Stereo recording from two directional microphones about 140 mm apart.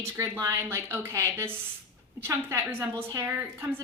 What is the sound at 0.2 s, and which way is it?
A woman's voice, 20° right (ahead or behind).